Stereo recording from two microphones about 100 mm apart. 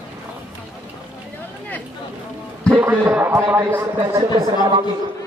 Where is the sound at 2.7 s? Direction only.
20° right (ahead or behind).